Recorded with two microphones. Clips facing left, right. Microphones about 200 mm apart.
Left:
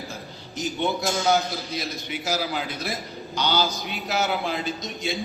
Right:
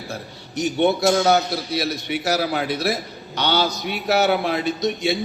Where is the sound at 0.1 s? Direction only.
70° right (ahead or behind).